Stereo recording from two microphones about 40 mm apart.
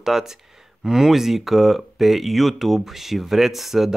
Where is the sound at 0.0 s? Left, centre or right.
Centre.